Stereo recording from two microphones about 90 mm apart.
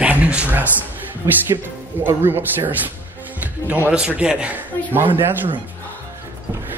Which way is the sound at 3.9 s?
10° right (ahead or behind).